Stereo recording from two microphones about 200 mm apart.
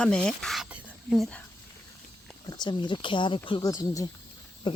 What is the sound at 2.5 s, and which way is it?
Speech, 20° left (ahead or behind).